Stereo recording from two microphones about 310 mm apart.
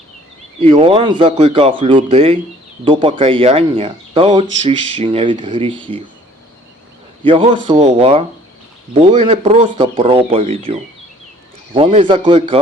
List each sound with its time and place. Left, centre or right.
0.6 s speech: centre
7.3 s speech: centre